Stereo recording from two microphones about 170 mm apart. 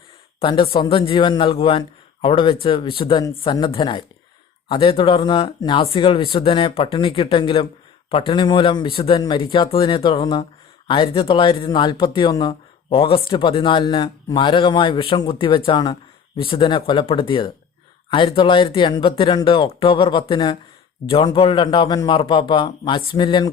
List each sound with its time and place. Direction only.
0.3 s speech: 30° left (ahead or behind)